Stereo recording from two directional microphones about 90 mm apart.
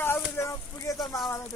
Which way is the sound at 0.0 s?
25° left (ahead or behind).